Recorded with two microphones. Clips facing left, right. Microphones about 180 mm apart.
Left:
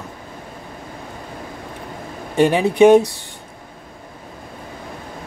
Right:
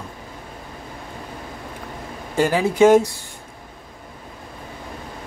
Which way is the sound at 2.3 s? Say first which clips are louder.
Left 4 dB; 20° left (ahead or behind).